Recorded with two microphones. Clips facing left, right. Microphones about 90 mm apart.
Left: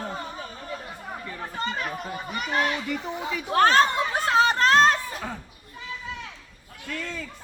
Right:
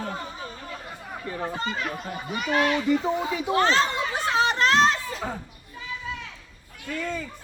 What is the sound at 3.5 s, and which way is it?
Chatter, 50° left (ahead or behind).